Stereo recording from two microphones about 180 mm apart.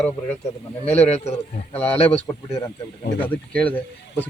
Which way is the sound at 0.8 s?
35° left (ahead or behind).